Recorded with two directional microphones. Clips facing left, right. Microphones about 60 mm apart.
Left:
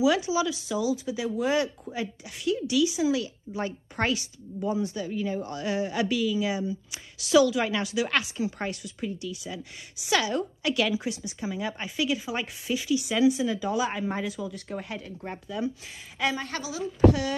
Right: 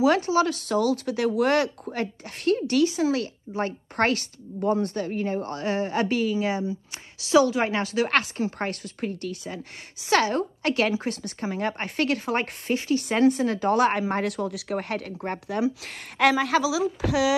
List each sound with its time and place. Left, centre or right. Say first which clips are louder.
0.0 s speech: right 3 dB; right
11.2 s speech: right 4 dB; right